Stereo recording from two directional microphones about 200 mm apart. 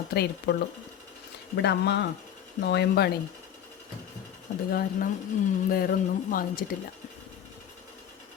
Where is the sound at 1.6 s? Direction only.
60° left (ahead or behind).